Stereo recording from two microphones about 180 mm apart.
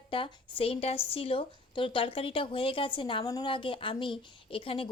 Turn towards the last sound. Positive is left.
turn(degrees=30)  # may be behind; listen again after turning